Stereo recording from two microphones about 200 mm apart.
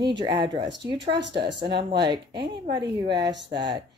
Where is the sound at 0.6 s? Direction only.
60° right (ahead or behind).